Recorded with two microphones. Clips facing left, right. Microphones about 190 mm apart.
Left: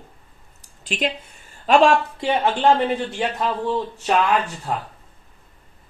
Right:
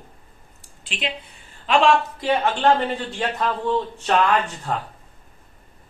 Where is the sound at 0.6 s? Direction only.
40° left (ahead or behind).